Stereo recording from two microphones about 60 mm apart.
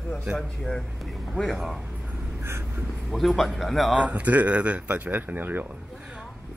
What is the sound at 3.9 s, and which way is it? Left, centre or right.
Speech, right.